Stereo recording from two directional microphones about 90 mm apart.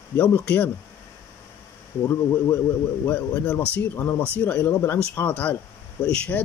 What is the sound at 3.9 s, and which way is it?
Speech, 25° left (ahead or behind).